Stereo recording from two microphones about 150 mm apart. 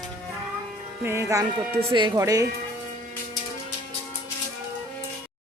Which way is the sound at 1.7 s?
35° right (ahead or behind).